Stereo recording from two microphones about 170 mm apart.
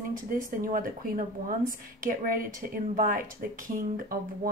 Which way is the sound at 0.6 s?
55° right (ahead or behind).